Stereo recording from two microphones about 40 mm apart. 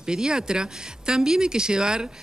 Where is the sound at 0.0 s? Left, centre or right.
Centre.